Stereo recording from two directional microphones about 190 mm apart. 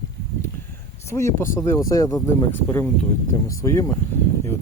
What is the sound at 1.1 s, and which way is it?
Speech, 15° left (ahead or behind).